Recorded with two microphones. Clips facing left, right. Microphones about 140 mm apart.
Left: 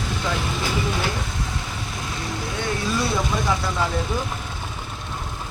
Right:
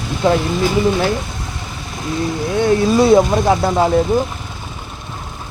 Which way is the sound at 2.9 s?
55° right (ahead or behind).